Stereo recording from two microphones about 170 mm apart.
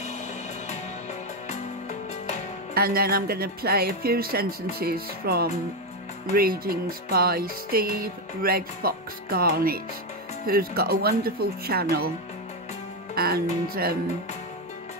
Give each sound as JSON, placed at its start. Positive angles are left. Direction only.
{"t": 1.5, "sound": "music", "side_deg": 40}
{"t": 2.7, "sound": "music", "side_deg": -60}
{"t": 13.1, "sound": "music", "side_deg": -60}